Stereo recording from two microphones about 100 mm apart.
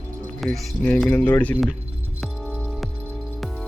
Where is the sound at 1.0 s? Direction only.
20° left (ahead or behind).